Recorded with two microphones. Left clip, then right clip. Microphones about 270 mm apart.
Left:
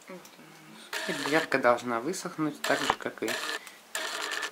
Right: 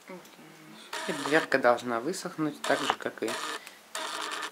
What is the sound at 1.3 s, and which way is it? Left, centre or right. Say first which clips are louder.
Speech: right 1 dB; centre.